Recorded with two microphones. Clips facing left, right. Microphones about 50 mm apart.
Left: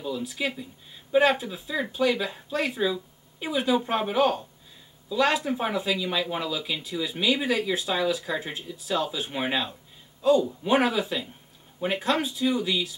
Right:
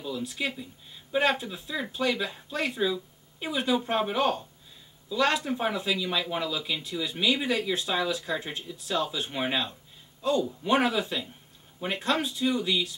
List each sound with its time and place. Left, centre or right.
0.0 s speech: centre